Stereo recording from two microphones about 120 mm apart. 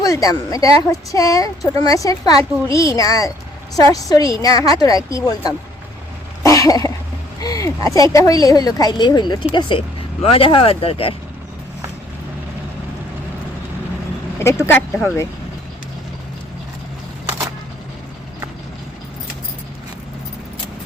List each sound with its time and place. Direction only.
0.0 s a woman's voice: 30° left (ahead or behind)
6.4 s cough: 30° left (ahead or behind)
7.4 s a woman's voice: 30° left (ahead or behind); by 11.1 s 50° left (ahead or behind)
14.7 s speech: 15° left (ahead or behind)